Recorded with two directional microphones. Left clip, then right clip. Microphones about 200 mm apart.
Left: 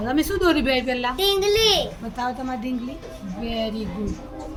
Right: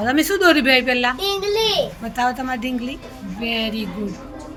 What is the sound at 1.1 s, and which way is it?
Speech, 55° left (ahead or behind).